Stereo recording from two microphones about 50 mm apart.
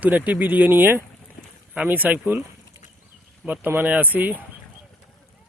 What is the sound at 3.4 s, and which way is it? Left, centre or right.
Speech, right.